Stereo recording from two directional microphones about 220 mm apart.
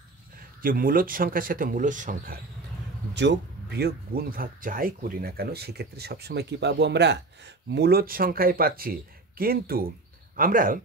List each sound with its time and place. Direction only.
0.6 s speech: 40° right (ahead or behind)
3.2 s speech: 50° right (ahead or behind)